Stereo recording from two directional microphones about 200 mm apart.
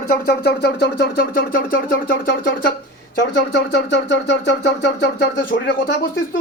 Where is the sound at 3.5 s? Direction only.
60° left (ahead or behind).